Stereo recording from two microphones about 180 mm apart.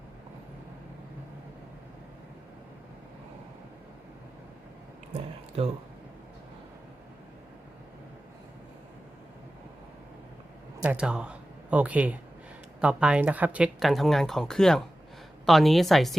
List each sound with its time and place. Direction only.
5.6 s speech: 35° right (ahead or behind)
10.8 s speech: 5° right (ahead or behind)